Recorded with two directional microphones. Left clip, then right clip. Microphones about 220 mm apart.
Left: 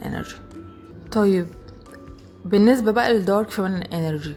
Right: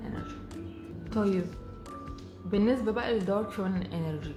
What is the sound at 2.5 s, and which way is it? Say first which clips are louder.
Speech: left 11 dB; 45° left (ahead or behind).